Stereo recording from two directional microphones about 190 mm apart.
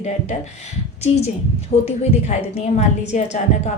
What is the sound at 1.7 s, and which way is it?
A woman's voice, 35° left (ahead or behind).